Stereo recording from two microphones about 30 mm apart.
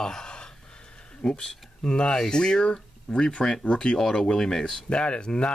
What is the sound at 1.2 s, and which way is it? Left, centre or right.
Speech, left.